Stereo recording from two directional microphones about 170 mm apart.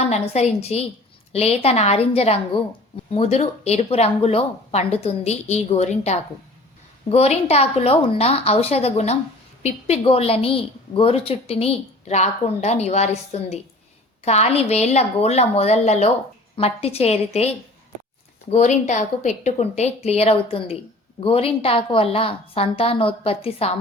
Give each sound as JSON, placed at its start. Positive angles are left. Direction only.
{"t": 0.0, "sound": "a woman's voice", "side_deg": 40}
{"t": 18.5, "sound": "a woman's voice", "side_deg": 45}